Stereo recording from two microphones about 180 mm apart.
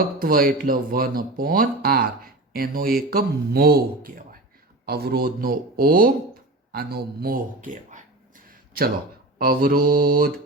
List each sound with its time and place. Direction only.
0.2 s speech: 55° right (ahead or behind)
8.4 s a sound: 55° right (ahead or behind)
9.4 s speech: 55° right (ahead or behind)